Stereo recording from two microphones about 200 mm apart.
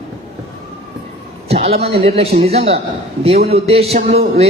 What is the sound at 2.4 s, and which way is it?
Music, 30° right (ahead or behind).